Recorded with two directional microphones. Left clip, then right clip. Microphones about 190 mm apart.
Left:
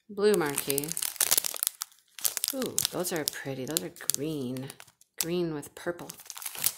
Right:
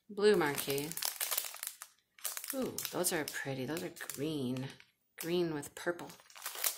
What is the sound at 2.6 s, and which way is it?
Speech, 30° left (ahead or behind).